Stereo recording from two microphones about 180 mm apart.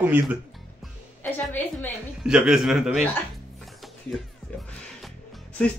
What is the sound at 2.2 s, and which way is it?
Speech, 5° right (ahead or behind).